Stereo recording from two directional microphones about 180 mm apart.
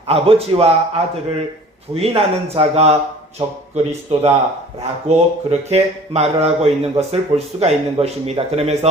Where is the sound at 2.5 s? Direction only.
35° right (ahead or behind).